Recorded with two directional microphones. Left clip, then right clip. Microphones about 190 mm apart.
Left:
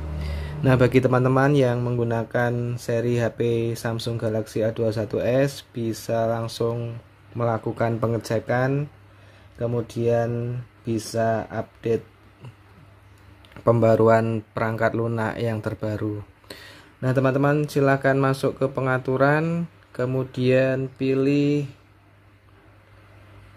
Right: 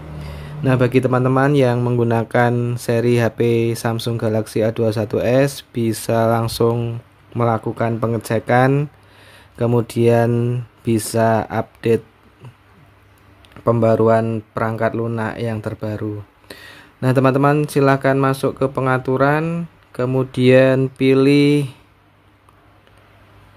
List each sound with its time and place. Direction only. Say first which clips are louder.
0.2 s speech: right 2 dB; centre (ahead or behind); by 6.9 s 25° right (ahead or behind)
7.3 s speech: right 5 dB; 15° right (ahead or behind)
13.7 s speech: right 3 dB; 5° right (ahead or behind); by 21.7 s 25° right (ahead or behind)